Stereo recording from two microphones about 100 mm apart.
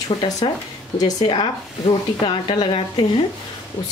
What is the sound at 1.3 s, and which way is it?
Speech, 70° left (ahead or behind).